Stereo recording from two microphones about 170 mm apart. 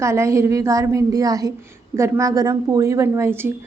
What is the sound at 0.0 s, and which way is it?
A woman's voice, 15° right (ahead or behind).